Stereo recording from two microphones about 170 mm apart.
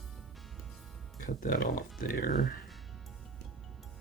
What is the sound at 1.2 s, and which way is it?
Speech, 55° left (ahead or behind).